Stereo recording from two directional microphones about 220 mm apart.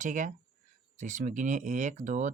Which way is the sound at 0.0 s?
35° right (ahead or behind).